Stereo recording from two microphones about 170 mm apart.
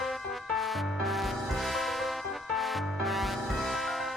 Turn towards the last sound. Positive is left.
turn(degrees=0)  # may be behind; listen again after turning